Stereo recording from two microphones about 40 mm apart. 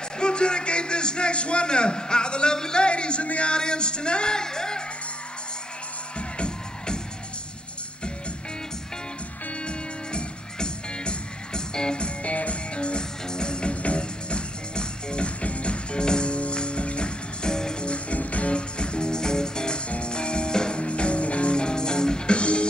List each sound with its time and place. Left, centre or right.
0.2 s a man's voice: left
6.1 s music: left
9.7 s music: left